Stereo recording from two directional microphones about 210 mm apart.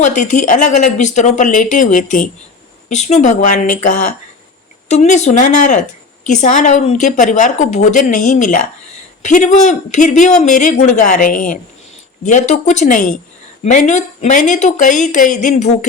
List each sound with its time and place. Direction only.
0.0 s a woman's voice: 35° left (ahead or behind)